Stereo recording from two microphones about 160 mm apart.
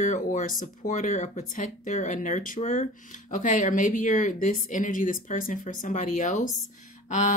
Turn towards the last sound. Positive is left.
turn(degrees=50)  # may be behind; listen again after turning